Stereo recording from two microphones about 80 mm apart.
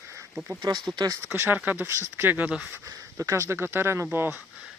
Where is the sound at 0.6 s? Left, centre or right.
Right.